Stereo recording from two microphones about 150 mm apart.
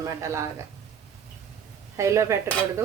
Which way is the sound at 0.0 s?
20° right (ahead or behind).